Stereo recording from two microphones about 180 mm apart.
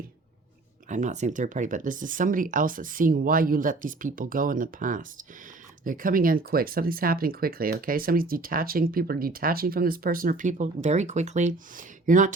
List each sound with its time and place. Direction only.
0.9 s speech: 40° right (ahead or behind)